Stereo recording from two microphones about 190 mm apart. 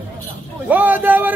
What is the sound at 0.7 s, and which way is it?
Speech, 10° right (ahead or behind).